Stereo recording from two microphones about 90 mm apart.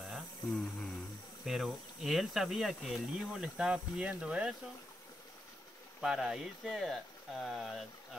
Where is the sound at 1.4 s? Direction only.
Centre (ahead or behind).